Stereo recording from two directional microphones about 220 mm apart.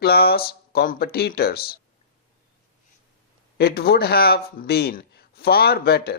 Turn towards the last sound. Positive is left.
turn(degrees=45)  # may be behind; listen again after turning